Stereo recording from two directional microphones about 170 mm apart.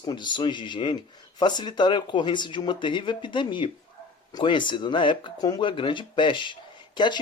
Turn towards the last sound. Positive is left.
turn(degrees=25)  # may be behind; listen again after turning